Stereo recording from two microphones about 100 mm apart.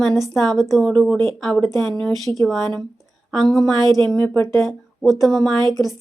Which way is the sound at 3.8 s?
45° right (ahead or behind).